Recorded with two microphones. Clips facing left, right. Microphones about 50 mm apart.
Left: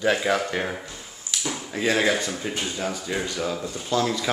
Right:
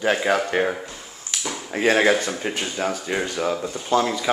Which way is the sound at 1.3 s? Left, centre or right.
Right.